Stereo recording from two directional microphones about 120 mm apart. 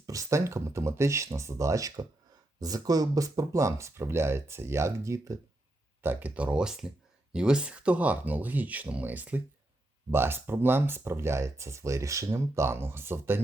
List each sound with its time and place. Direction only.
0.0 s speech: 30° right (ahead or behind)